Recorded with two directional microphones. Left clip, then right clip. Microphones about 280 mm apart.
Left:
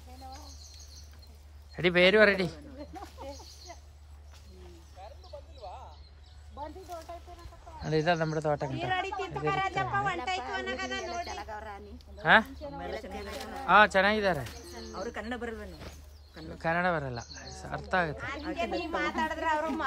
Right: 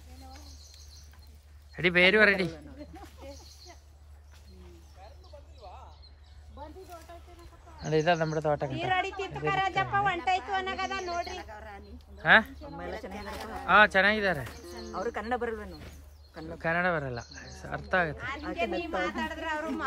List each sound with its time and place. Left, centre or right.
1.8 s speech: centre
2.9 s a sound: left
5.6 s a sound: left
6.6 s snake: left
7.8 s speech: centre
8.7 s speech: right; by 11.2 s centre
11.3 s a woman's voice: centre
12.7 s speech: centre
13.7 s speech: centre
14.4 s speech: centre
16.3 s speech: centre
18.8 s speech: centre